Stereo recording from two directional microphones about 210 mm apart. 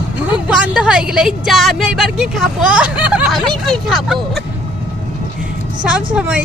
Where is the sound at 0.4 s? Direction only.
5° right (ahead or behind).